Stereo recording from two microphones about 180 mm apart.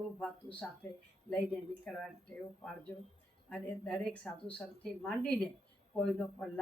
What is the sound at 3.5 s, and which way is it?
A woman's voice, 5° left (ahead or behind).